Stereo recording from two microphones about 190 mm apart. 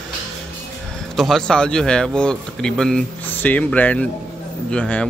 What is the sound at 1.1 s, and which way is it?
Speech, centre (ahead or behind).